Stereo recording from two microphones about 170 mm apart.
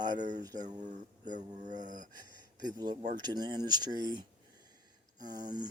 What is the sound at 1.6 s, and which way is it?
Speech, 45° right (ahead or behind).